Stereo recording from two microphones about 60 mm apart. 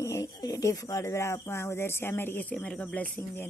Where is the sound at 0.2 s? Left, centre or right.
Left.